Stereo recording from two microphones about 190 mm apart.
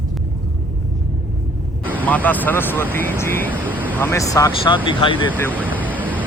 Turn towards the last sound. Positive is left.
turn(degrees=-10)  # may be behind; listen again after turning